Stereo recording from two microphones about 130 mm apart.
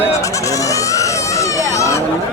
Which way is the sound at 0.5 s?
25° left (ahead or behind).